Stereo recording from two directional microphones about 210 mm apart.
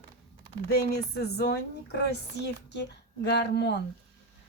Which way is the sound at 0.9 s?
50° left (ahead or behind).